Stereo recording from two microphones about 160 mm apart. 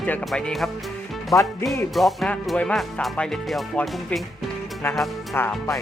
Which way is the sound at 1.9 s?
Centre (ahead or behind).